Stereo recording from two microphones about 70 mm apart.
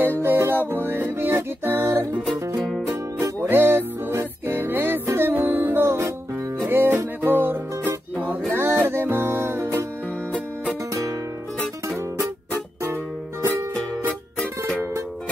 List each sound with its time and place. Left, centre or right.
0.2 s music: right
2.3 s music: right
2.6 s music: centre
3.2 s music: right